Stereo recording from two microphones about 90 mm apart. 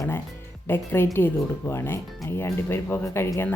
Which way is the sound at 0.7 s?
25° left (ahead or behind).